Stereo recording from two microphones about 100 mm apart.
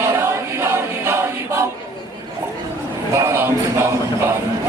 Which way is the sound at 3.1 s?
30° right (ahead or behind).